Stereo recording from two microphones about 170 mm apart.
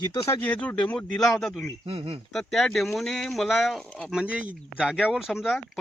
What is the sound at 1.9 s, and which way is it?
Speech, 35° right (ahead or behind).